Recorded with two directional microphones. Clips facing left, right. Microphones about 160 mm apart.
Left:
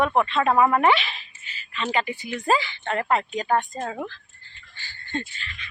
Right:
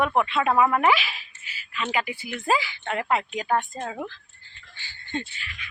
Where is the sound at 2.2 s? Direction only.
5° right (ahead or behind).